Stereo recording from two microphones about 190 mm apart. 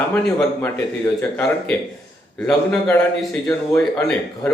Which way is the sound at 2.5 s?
5° left (ahead or behind).